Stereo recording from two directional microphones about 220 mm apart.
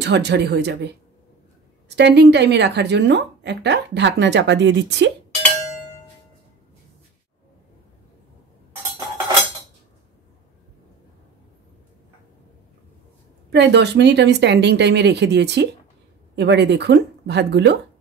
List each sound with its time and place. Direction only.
0.0 s a woman's voice: 50° right (ahead or behind)
1.9 s a woman's voice: 50° right (ahead or behind)
13.5 s a woman's voice: 50° right (ahead or behind)